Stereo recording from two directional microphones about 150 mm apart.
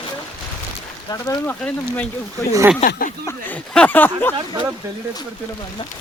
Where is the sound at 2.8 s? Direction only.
65° left (ahead or behind).